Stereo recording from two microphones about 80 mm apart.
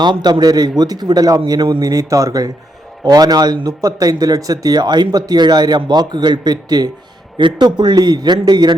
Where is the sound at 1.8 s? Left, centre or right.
Right.